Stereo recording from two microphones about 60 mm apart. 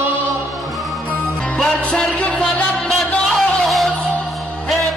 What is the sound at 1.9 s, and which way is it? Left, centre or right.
Music, left.